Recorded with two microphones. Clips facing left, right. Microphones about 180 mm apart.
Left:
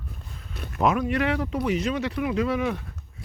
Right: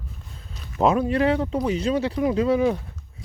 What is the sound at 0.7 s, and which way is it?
Speech, 30° right (ahead or behind).